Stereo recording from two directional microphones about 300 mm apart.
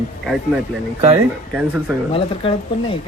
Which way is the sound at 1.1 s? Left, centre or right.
Centre.